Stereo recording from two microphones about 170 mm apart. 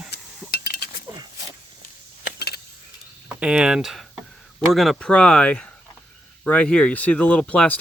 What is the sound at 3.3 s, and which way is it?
Speech, 5° right (ahead or behind).